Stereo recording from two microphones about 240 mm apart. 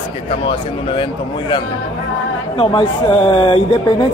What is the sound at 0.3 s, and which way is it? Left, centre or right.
Speech, left.